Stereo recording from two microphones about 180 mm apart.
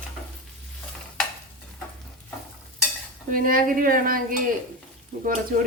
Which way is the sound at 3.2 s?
50° right (ahead or behind).